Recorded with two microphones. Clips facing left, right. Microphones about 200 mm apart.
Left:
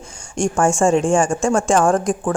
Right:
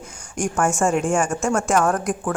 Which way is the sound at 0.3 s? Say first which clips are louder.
Left 4 dB; 30° left (ahead or behind).